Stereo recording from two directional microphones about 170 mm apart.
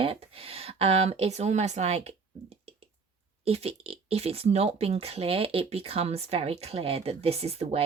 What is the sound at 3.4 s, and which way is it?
Speech, 35° right (ahead or behind).